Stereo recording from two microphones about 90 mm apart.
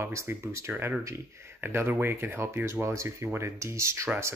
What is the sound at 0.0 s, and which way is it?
Speech, 30° right (ahead or behind).